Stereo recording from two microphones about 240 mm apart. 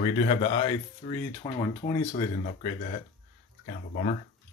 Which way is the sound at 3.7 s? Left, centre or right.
Left.